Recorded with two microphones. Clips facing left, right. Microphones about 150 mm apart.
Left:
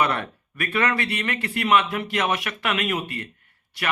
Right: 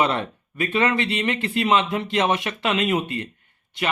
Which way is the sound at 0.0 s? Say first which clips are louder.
Right 2 dB; 20° right (ahead or behind).